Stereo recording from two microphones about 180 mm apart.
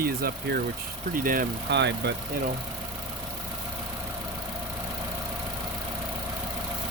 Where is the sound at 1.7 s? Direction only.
70° right (ahead or behind).